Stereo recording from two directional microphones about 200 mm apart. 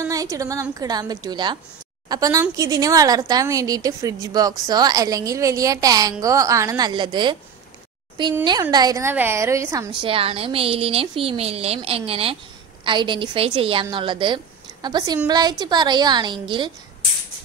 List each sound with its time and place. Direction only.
0.0 s a woman's voice: 15° right (ahead or behind)
8.5 s a woman's voice: 20° right (ahead or behind)